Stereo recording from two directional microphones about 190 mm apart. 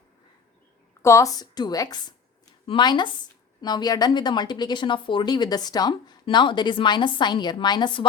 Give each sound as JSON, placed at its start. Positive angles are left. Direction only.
{"t": 1.0, "sound": "a woman's voice", "side_deg": 15}